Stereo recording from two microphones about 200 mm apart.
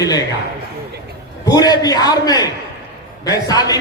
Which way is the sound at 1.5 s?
20° left (ahead or behind).